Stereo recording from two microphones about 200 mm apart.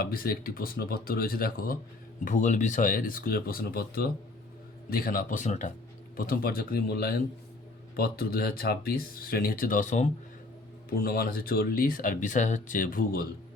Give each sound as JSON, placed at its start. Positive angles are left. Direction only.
{"t": 0.0, "sound": "speech", "side_deg": 50}
{"t": 10.8, "sound": "speech", "side_deg": 50}